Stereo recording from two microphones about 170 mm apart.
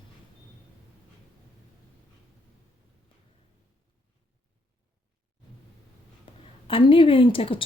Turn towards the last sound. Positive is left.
turn(degrees=30)  # may be behind; listen again after turning